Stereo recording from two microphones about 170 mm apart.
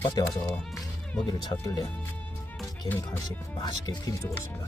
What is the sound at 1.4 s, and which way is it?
Speech, 25° left (ahead or behind).